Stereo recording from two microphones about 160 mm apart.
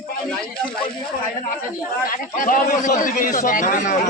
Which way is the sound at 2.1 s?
55° left (ahead or behind).